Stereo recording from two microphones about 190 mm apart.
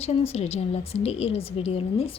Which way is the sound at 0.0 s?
30° left (ahead or behind).